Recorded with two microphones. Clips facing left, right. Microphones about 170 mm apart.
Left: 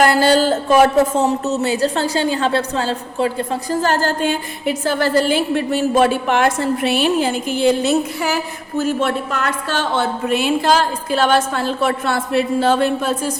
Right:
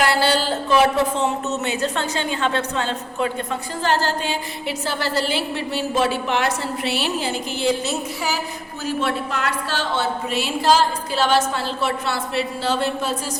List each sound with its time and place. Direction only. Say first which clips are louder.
0.0 s speech: left 6 dB; 45° left (ahead or behind)